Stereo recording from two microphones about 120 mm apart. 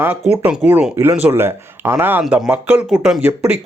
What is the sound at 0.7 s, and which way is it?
Speech, 10° right (ahead or behind).